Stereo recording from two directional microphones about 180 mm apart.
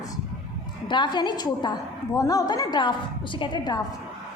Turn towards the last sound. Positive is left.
turn(degrees=25)  # may be behind; listen again after turning